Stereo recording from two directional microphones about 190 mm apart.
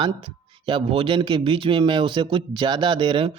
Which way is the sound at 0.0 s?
25° right (ahead or behind).